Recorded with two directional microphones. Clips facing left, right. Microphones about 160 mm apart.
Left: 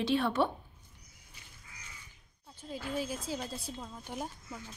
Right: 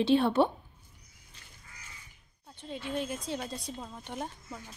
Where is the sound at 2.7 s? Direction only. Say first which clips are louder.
Right 1 dB; centre (ahead or behind).